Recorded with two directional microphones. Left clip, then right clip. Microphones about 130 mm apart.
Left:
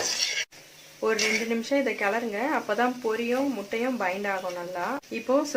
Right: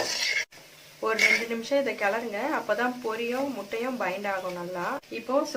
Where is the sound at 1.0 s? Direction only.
45° left (ahead or behind).